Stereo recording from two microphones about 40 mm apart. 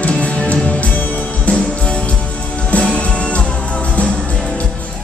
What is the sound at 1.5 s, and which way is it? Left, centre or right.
Music, left.